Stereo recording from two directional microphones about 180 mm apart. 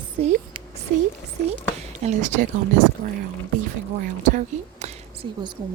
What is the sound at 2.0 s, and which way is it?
Speech, 45° right (ahead or behind).